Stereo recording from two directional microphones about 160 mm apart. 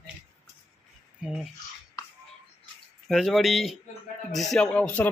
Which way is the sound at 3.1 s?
Centre (ahead or behind).